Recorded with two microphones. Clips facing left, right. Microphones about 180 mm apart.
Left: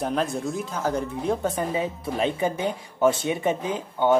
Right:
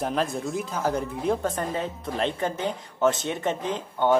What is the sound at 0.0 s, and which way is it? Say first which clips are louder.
Speech: left 1 dB; centre (ahead or behind).